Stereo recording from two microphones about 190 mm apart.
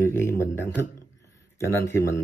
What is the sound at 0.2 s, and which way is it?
Speech, 15° left (ahead or behind).